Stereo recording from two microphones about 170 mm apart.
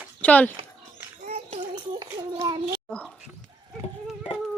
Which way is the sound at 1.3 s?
40° right (ahead or behind).